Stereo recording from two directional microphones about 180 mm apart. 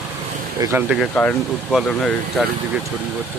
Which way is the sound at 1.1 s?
10° left (ahead or behind).